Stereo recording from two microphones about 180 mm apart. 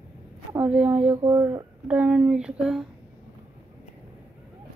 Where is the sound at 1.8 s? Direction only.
5° right (ahead or behind).